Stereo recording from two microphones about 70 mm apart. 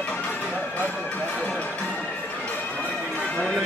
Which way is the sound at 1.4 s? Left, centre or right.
Centre.